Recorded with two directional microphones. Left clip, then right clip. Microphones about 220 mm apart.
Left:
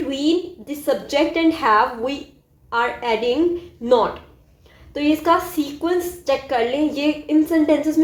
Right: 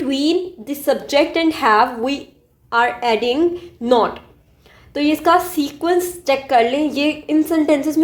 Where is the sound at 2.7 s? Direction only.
45° right (ahead or behind).